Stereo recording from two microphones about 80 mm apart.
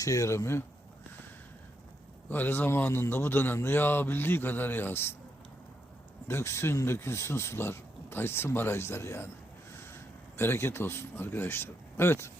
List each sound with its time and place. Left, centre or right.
0.0 s speech: left
2.3 s a man's voice: left
6.2 s speech: left
10.3 s speech: left